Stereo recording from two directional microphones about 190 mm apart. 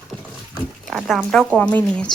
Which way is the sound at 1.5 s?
5° left (ahead or behind).